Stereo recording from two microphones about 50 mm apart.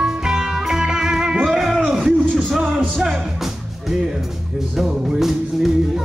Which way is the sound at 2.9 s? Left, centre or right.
Centre.